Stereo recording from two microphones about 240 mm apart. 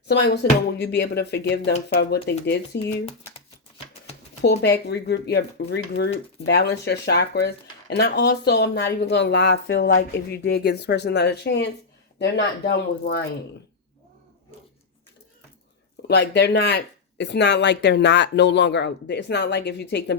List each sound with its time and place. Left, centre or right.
0.1 s speech: left
2.7 s speech: left
4.4 s speech: left
16.0 s speech: left